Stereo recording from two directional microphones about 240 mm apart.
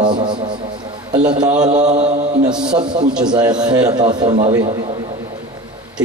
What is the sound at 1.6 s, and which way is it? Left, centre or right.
Mantra, right.